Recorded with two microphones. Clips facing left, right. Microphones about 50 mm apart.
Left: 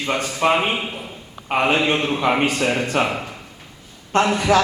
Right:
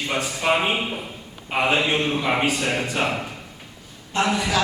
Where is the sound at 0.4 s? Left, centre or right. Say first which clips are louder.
Left 3 dB; left.